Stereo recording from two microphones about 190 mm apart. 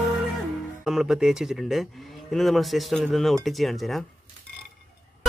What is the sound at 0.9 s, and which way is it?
Speech, 5° right (ahead or behind).